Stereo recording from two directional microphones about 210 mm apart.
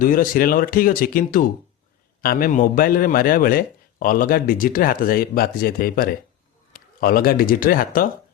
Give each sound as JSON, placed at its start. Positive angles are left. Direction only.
{"t": 0.0, "sound": "speech", "side_deg": 40}